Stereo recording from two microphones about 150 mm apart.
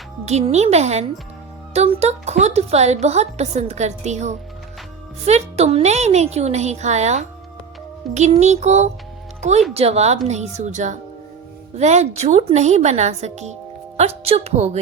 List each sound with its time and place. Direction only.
0.3 s a woman's voice: 45° right (ahead or behind)